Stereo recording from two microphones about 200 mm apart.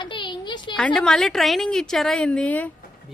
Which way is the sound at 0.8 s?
5° left (ahead or behind).